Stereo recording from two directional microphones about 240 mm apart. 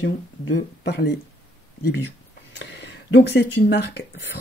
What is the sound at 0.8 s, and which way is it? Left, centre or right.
Speech, left.